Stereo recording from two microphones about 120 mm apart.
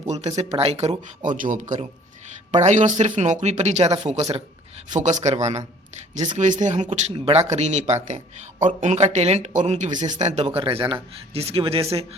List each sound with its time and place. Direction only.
0.1 s speech: 70° right (ahead or behind)
1.4 s speech: 90° right; by 4.4 s 60° right (ahead or behind)
4.9 s speech: 80° right
6.3 s speech: 90° right
7.1 s speech: 60° right (ahead or behind)
10.6 s speech: 45° right (ahead or behind)